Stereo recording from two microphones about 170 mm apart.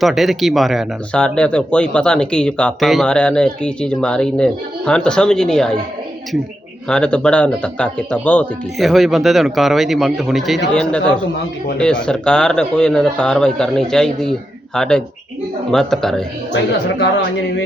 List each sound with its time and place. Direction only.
0.0 s speech: centre (ahead or behind)
6.8 s speech: 5° left (ahead or behind)
11.8 s speech: 5° left (ahead or behind)
17.0 s speech: 90° left